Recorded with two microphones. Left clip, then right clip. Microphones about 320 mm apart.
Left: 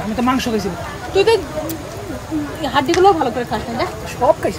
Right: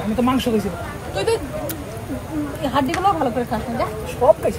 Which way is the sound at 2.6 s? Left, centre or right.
Left.